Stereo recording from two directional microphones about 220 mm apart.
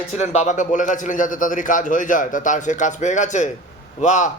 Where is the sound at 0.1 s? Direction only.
30° left (ahead or behind).